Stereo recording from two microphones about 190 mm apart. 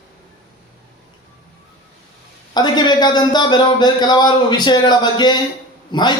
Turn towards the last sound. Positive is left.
turn(degrees=25)  # may be behind; listen again after turning